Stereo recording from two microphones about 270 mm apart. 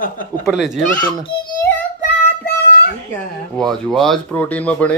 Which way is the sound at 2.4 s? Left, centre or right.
Left.